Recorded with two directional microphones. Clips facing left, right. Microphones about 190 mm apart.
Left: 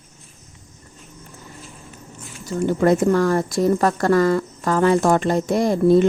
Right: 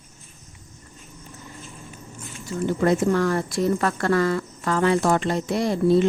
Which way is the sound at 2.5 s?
50° left (ahead or behind).